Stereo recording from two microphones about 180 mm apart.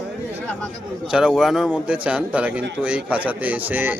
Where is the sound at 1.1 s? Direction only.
Centre (ahead or behind).